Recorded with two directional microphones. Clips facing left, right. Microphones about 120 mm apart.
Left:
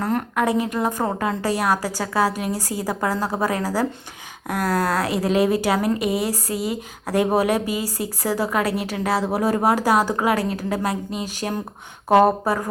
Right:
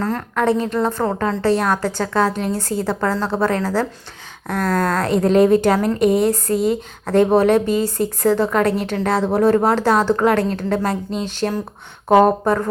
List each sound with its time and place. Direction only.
0.0 s a woman's voice: 20° left (ahead or behind)